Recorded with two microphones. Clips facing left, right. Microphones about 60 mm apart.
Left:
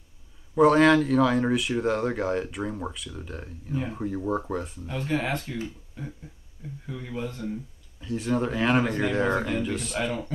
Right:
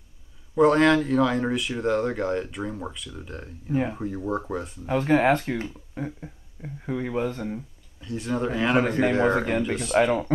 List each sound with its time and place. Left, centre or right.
0.6 s speech: centre
4.8 s speech: right
8.0 s speech: centre
9.3 s speech: right
9.9 s speech: right